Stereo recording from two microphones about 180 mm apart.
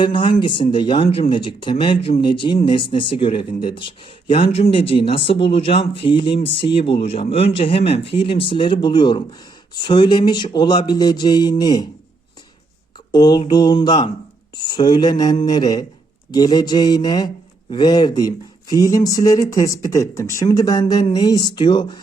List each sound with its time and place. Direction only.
0.0 s speech: 25° left (ahead or behind)
13.1 s speech: 20° left (ahead or behind)